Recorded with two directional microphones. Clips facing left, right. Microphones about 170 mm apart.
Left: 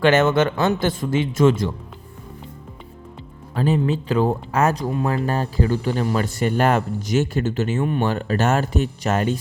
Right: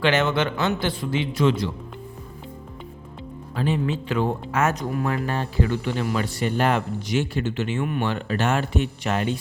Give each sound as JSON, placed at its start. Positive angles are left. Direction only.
{"t": 0.0, "sound": "a man's voice", "side_deg": 45}
{"t": 3.5, "sound": "speech", "side_deg": 40}